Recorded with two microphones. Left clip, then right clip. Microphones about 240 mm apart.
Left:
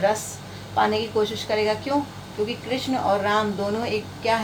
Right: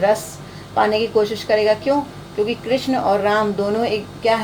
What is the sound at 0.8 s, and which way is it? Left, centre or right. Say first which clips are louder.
A woman's voice: right 5 dB; right.